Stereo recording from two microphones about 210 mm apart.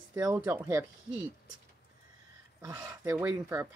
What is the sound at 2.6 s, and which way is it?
Speech, 15° right (ahead or behind).